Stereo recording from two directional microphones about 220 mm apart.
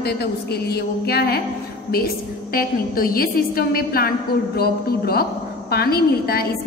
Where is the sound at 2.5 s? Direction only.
40° left (ahead or behind).